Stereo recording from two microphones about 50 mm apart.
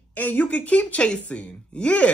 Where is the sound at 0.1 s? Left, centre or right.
Left.